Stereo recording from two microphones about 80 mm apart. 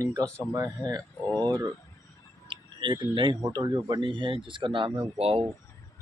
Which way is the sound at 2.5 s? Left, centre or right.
Right.